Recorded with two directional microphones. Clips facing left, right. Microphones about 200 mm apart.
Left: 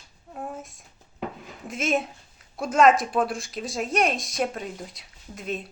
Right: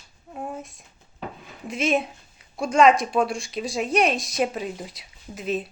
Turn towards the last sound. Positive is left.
turn(degrees=0)  # may be behind; listen again after turning